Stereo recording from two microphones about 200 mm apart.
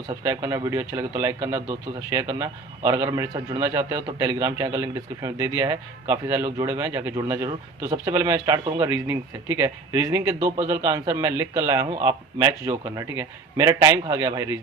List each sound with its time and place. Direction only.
0.1 s a man's voice: 15° right (ahead or behind)